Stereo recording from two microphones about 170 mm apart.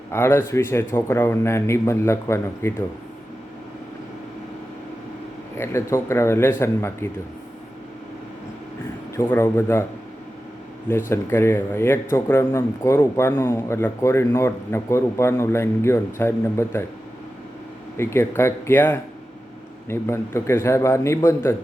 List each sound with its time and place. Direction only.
0.1 s a man's voice: 15° left (ahead or behind)
5.5 s a man's voice: 15° left (ahead or behind)
9.1 s a man's voice: 15° left (ahead or behind)
10.8 s a man's voice: 15° left (ahead or behind)
17.9 s a man's voice: 15° left (ahead or behind)